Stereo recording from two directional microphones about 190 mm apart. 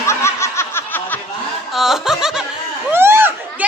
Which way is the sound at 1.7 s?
Centre (ahead or behind).